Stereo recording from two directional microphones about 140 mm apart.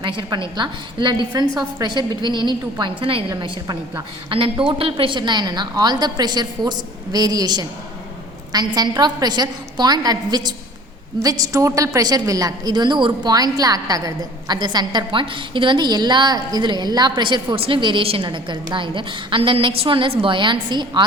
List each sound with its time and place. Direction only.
0.0 s a woman's voice: 35° right (ahead or behind)